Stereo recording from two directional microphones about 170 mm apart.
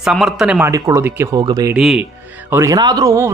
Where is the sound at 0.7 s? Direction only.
20° right (ahead or behind).